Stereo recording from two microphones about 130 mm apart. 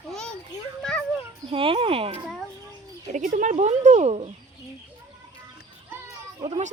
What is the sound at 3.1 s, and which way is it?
Speech, 75° right (ahead or behind).